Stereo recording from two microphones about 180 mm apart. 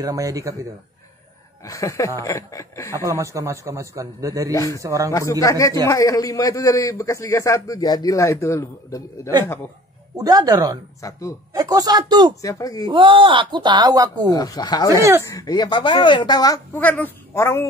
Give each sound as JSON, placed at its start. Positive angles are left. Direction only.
{"t": 0.0, "sound": "speech", "side_deg": -20}
{"t": 1.6, "sound": "a man's voice", "side_deg": 15}
{"t": 3.1, "sound": "a man's voice", "side_deg": -15}
{"t": 4.5, "sound": "a man's voice", "side_deg": 20}
{"t": 4.7, "sound": "a man's voice", "side_deg": -20}
{"t": 5.4, "sound": "a man's voice", "side_deg": 20}
{"t": 10.1, "sound": "speech", "side_deg": -20}
{"t": 11.0, "sound": "a man's voice", "side_deg": 15}
{"t": 11.5, "sound": "speech", "side_deg": -20}
{"t": 12.4, "sound": "speech", "side_deg": 20}
{"t": 12.8, "sound": "speech", "side_deg": -30}
{"t": 14.3, "sound": "speech", "side_deg": 20}
{"t": 16.7, "sound": "a man's voice", "side_deg": 10}